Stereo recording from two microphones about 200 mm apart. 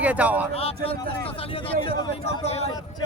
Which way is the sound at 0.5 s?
30° left (ahead or behind).